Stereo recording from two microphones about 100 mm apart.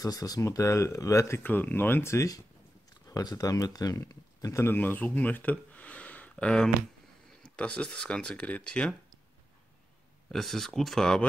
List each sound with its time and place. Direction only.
0.0 s speech: 40° left (ahead or behind)
1.4 s speech: 20° left (ahead or behind)
4.7 s speech: 15° left (ahead or behind)
10.3 s speech: 5° left (ahead or behind)